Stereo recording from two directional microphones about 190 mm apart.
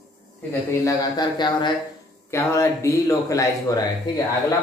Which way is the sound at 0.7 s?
20° left (ahead or behind).